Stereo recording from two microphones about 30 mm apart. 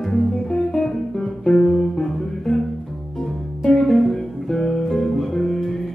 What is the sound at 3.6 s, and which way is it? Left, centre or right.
Music, centre.